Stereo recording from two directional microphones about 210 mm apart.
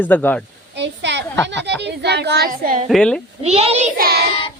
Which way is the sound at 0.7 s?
55° right (ahead or behind).